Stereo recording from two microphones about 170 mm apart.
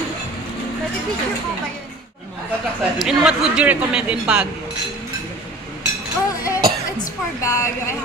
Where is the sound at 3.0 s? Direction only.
5° right (ahead or behind).